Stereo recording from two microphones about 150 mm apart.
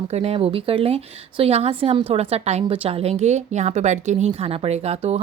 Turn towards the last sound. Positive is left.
turn(degrees=-45)  # may be behind; listen again after turning